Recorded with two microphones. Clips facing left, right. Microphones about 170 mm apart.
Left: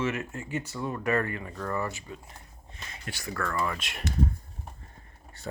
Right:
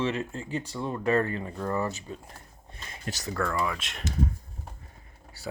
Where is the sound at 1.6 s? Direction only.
20° right (ahead or behind).